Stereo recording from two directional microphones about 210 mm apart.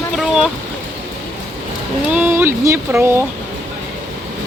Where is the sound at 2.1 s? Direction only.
10° right (ahead or behind).